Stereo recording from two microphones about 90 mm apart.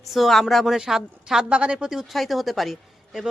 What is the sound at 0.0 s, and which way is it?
A woman's voice, centre (ahead or behind).